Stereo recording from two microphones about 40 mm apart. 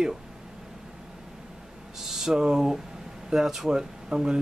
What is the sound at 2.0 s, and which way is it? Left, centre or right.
A man's voice, centre.